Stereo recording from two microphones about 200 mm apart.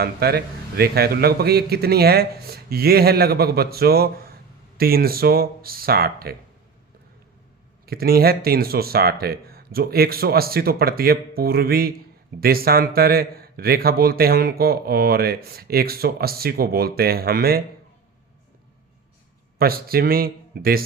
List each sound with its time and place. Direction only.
0.0 s a man's voice: 50° right (ahead or behind)
7.9 s a man's voice: 50° right (ahead or behind)
19.5 s a man's voice: 50° right (ahead or behind)